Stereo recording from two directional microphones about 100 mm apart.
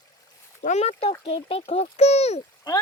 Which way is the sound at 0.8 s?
90° left.